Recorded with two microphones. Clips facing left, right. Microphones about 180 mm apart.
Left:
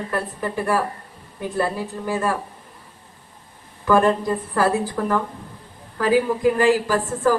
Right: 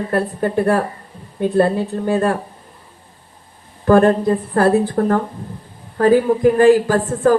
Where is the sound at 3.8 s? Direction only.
55° right (ahead or behind).